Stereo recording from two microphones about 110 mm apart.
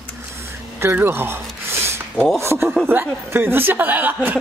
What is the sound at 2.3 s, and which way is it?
Speech, 25° right (ahead or behind).